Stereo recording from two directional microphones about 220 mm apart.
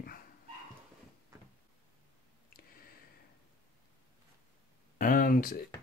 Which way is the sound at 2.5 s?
40° left (ahead or behind).